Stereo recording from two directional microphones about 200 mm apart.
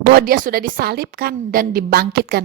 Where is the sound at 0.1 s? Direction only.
45° right (ahead or behind).